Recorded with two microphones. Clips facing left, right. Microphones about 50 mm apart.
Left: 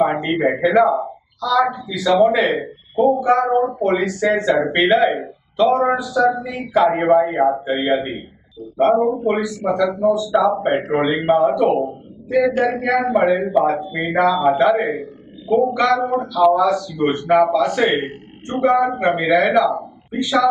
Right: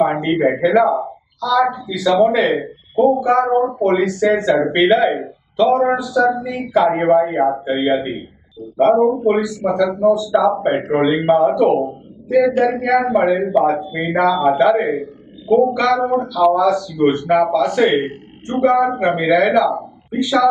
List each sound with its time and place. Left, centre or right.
0.0 s speech: centre
9.4 s speech: centre
18.1 s speech: centre
18.8 s speech: centre